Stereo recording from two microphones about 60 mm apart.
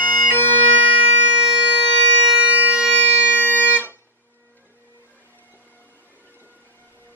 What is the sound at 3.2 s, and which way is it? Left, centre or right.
Music, left.